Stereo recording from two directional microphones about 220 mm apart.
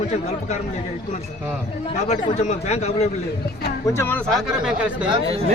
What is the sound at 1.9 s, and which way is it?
A man's voice, 30° left (ahead or behind).